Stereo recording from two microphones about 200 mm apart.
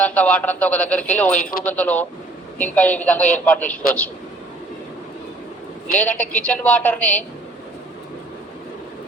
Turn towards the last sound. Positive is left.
turn(degrees=5)  # may be behind; listen again after turning